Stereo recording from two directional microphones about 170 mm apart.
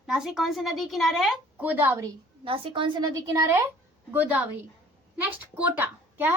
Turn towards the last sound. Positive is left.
turn(degrees=-10)  # may be behind; listen again after turning